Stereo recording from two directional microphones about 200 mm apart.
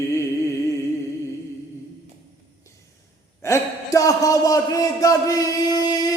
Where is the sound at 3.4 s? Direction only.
15° left (ahead or behind).